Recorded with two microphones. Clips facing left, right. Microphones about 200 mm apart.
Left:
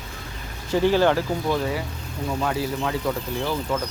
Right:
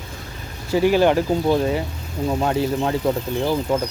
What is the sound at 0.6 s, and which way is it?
Speech, 10° right (ahead or behind).